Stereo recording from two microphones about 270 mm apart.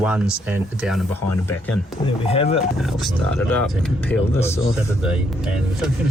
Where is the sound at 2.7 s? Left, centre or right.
Centre.